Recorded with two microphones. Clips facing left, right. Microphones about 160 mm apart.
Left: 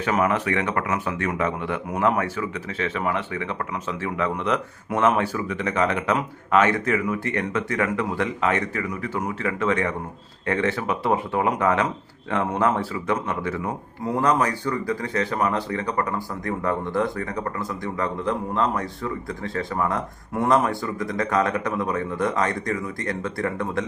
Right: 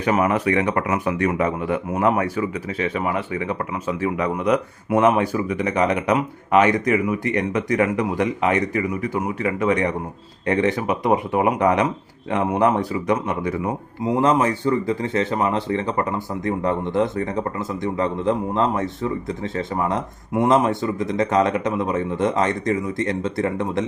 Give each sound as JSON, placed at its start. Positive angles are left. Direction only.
{"t": 0.0, "sound": "a man's voice", "side_deg": -10}
{"t": 14.2, "sound": "speech", "side_deg": -20}